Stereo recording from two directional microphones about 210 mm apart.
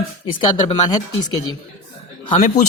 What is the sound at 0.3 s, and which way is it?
Speech, 20° left (ahead or behind).